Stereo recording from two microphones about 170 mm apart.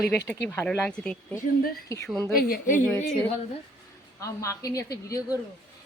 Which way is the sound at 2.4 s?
55° left (ahead or behind).